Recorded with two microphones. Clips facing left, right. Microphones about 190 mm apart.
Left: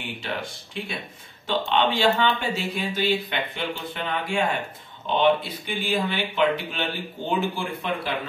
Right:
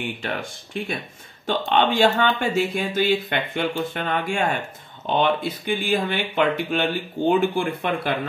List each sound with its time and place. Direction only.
0.2 s speech: 50° right (ahead or behind)